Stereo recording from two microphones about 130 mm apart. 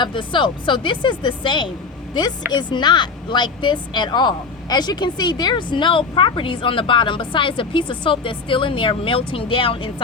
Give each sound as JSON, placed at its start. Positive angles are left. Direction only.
{"t": 0.0, "sound": "a woman's voice", "side_deg": 40}